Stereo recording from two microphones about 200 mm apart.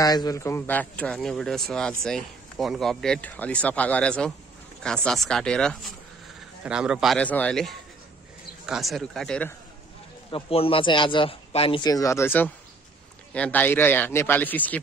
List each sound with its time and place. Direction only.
0.0 s a man's voice: 20° left (ahead or behind); by 9.5 s 5° left (ahead or behind)
10.3 s a man's voice: 25° left (ahead or behind); by 14.8 s 10° left (ahead or behind)